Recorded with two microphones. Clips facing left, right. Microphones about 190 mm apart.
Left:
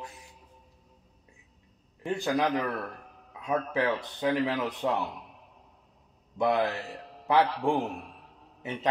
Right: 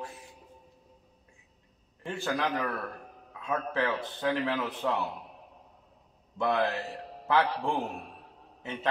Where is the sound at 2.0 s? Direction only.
15° left (ahead or behind).